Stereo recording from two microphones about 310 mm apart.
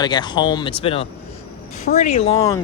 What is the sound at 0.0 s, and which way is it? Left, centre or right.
Speech, centre.